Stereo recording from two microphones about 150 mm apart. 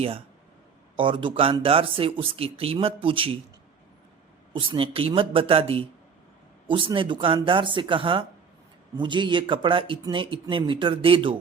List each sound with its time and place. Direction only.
0.9 s speech: 35° right (ahead or behind)
4.6 s speech: 35° right (ahead or behind)